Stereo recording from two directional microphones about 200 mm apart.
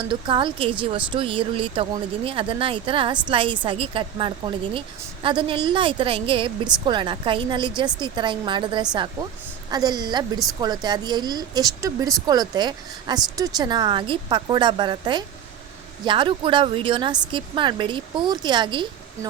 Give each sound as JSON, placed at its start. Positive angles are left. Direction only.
{"t": 0.1, "sound": "a woman's voice", "side_deg": -25}